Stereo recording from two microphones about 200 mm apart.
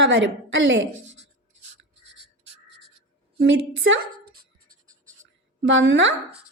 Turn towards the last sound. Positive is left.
turn(degrees=-70)  # may be behind; listen again after turning